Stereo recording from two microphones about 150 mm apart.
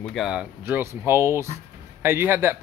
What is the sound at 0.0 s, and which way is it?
Speech, centre (ahead or behind).